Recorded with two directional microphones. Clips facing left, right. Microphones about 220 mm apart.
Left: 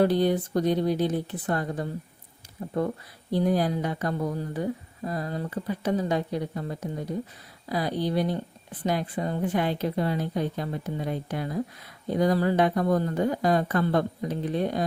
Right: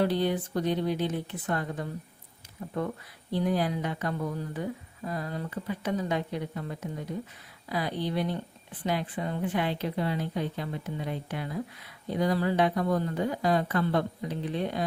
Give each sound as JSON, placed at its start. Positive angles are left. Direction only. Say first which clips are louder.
{"t": 0.0, "sound": "speech", "louder": "left 4 dB", "side_deg": 45}
{"t": 3.3, "sound": "a woman's voice", "louder": "left 4 dB", "side_deg": 40}